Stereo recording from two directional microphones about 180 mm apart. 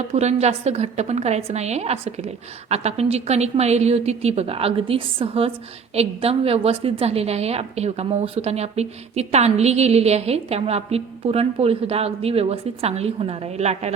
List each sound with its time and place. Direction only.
0.1 s a woman's voice: 40° right (ahead or behind)